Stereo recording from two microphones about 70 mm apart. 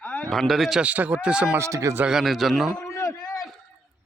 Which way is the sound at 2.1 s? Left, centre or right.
Centre.